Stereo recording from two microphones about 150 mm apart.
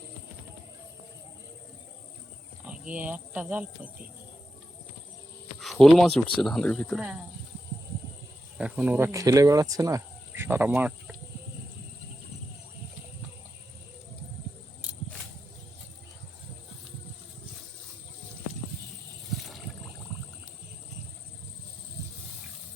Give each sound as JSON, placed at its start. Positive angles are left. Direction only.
{"t": 2.6, "sound": "speech", "side_deg": -10}
{"t": 5.5, "sound": "speech", "side_deg": 0}
{"t": 8.5, "sound": "speech", "side_deg": -10}
{"t": 19.3, "sound": "boat", "side_deg": 0}